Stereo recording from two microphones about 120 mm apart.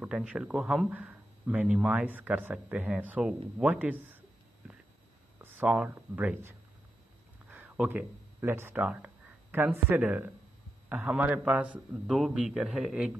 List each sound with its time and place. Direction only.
0.0 s a man's voice: 10° right (ahead or behind)
5.4 s speech: 15° right (ahead or behind)
7.4 s a sound: 10° right (ahead or behind)
8.4 s a man's voice: 20° right (ahead or behind)